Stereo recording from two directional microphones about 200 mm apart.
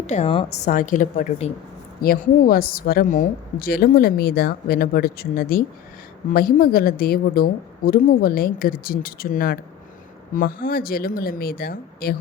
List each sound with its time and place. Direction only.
0.1 s a woman's voice: 30° left (ahead or behind); by 12.1 s 45° left (ahead or behind)